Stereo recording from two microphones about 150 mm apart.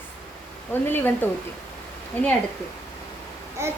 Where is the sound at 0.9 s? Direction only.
15° left (ahead or behind).